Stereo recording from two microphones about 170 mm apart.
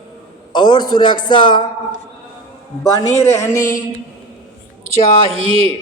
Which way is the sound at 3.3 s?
20° left (ahead or behind).